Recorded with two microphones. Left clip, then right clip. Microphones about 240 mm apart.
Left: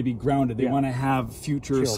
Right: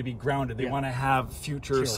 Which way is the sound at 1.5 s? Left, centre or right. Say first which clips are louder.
Left 5 dB; centre.